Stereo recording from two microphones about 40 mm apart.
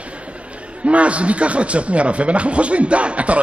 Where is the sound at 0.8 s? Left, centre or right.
Right.